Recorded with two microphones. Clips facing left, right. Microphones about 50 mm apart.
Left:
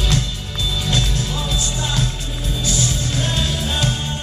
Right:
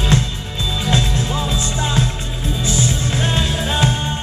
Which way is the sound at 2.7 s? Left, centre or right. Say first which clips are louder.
Right 3 dB; right.